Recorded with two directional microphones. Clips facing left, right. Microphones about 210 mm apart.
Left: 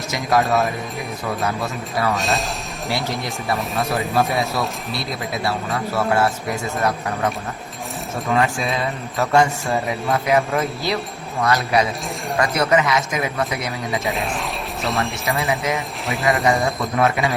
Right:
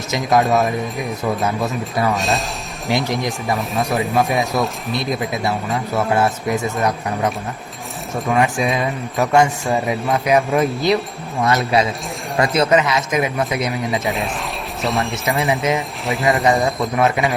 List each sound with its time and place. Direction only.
0.1 s a man's voice: 20° right (ahead or behind)
0.4 s speech: centre (ahead or behind)
1.5 s a man's voice: 20° right (ahead or behind)
2.1 s speech: centre (ahead or behind)
2.9 s speech: 15° right (ahead or behind)
3.5 s speech: centre (ahead or behind)
4.9 s a man's voice: 20° right (ahead or behind)
8.4 s a man's voice: 15° right (ahead or behind)
14.0 s speech: centre (ahead or behind)
15.4 s a man's voice: 20° right (ahead or behind)
16.0 s speech: centre (ahead or behind)
17.0 s a man's voice: 20° right (ahead or behind)